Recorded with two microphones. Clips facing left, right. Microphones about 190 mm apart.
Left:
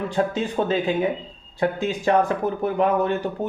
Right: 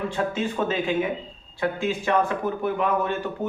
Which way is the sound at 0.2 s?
35° left (ahead or behind).